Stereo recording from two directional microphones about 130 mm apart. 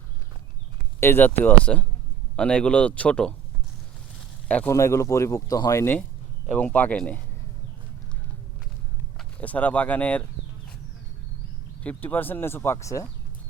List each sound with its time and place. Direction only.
0.9 s speech: 15° left (ahead or behind)
4.4 s speech: 10° left (ahead or behind)
4.7 s speech: 20° left (ahead or behind)
9.4 s speech: 10° left (ahead or behind)
11.8 s speech: 10° left (ahead or behind)